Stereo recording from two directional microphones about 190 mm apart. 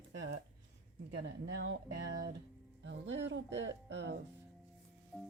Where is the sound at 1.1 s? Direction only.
60° right (ahead or behind).